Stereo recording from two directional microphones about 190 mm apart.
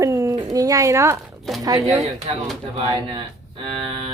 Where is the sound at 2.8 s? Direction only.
30° right (ahead or behind).